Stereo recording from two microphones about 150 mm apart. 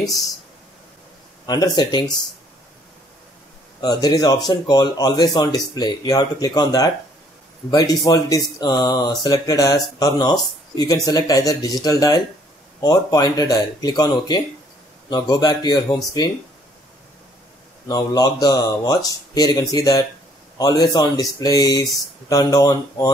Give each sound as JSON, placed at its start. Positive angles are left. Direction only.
{"t": 1.4, "sound": "speech", "side_deg": 25}
{"t": 3.8, "sound": "speech", "side_deg": 25}
{"t": 17.8, "sound": "speech", "side_deg": 25}